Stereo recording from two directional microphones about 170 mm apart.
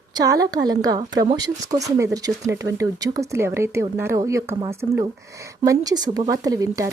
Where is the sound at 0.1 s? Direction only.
20° right (ahead or behind).